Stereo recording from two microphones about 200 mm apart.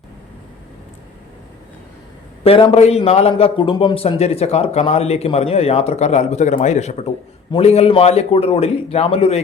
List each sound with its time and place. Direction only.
2.4 s a man's voice: 30° left (ahead or behind)